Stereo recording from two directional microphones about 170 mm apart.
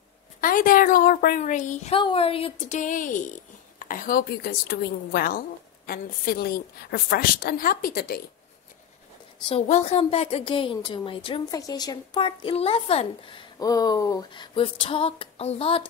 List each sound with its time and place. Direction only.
0.4 s speech: 55° left (ahead or behind)
2.0 s a woman's voice: 30° left (ahead or behind)
2.8 s a woman's voice: 50° left (ahead or behind)
9.5 s a woman's voice: 40° left (ahead or behind)
13.6 s a woman's voice: 20° left (ahead or behind)